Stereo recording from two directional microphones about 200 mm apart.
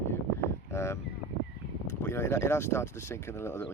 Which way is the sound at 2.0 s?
10° left (ahead or behind).